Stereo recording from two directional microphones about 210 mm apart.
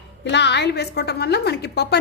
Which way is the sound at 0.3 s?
55° left (ahead or behind).